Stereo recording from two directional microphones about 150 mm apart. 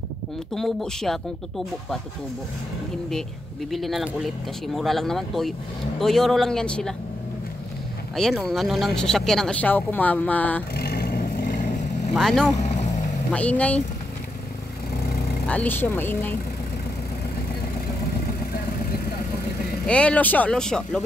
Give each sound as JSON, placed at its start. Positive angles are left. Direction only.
{"t": 0.6, "sound": "speech", "side_deg": 0}
{"t": 3.7, "sound": "speech", "side_deg": 0}
{"t": 8.2, "sound": "speech", "side_deg": 0}
{"t": 10.8, "sound": "vehicle", "side_deg": 90}
{"t": 12.1, "sound": "speech", "side_deg": 0}
{"t": 12.5, "sound": "vehicle", "side_deg": 50}
{"t": 13.3, "sound": "speech", "side_deg": 10}
{"t": 15.4, "sound": "speech", "side_deg": 10}
{"t": 19.9, "sound": "speech", "side_deg": 10}